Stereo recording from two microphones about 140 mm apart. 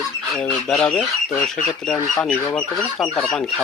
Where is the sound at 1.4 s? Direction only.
5° left (ahead or behind).